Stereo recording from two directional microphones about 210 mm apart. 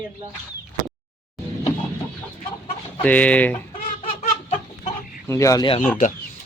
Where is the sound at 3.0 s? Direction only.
5° left (ahead or behind).